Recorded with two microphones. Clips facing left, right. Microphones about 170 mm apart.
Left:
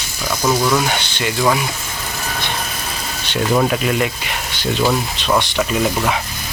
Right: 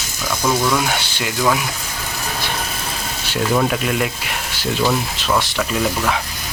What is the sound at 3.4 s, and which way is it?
Speech, 5° left (ahead or behind).